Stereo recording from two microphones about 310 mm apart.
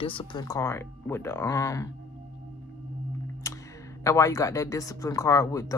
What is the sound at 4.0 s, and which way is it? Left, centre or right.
Speech, centre.